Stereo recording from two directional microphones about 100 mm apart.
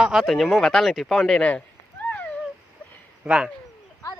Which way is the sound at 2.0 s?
15° left (ahead or behind).